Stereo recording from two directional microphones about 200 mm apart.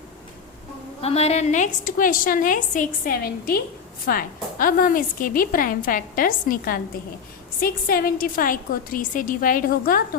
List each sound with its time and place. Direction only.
1.0 s a woman's voice: 30° left (ahead or behind)